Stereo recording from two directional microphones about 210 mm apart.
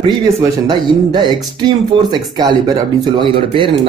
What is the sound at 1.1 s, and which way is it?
A woman's voice, 20° right (ahead or behind).